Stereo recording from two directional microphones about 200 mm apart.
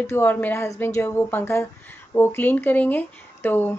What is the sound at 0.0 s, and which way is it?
A woman's voice, 10° left (ahead or behind).